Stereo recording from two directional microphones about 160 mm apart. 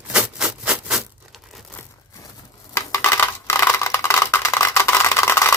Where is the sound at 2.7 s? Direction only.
15° left (ahead or behind).